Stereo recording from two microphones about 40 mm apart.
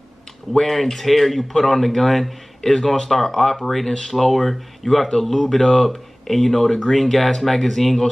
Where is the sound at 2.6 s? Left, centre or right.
Centre.